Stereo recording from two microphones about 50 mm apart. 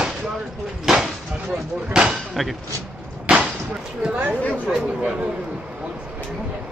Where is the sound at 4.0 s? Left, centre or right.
Right.